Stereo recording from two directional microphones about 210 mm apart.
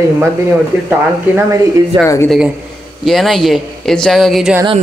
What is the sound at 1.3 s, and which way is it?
Speech, 10° right (ahead or behind).